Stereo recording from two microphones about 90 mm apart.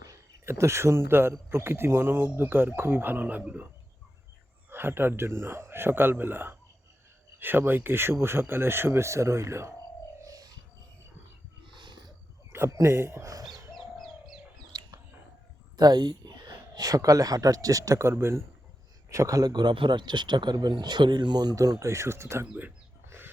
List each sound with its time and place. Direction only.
0.4 s a man's voice: 30° right (ahead or behind)
4.7 s a man's voice: 25° right (ahead or behind)
10.2 s a sound: 45° right (ahead or behind)
11.7 s a sound: 60° right (ahead or behind)
12.5 s a man's voice: 30° right (ahead or behind)
13.3 s bird: 45° right (ahead or behind)
13.7 s bird: centre (ahead or behind)
14.7 s a sound: 45° right (ahead or behind)
15.8 s speech: 50° right (ahead or behind); by 22.4 s 30° right (ahead or behind)
23.0 s dog: 25° right (ahead or behind)